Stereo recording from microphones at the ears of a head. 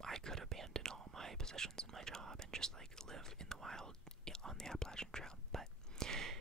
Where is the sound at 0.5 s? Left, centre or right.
Right.